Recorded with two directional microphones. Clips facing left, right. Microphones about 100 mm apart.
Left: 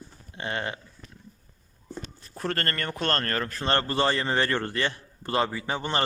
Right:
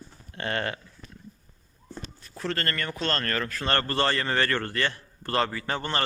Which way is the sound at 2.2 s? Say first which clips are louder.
Left 1 dB; 45° left (ahead or behind).